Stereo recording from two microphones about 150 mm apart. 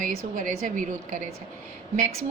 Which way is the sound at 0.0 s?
65° right (ahead or behind).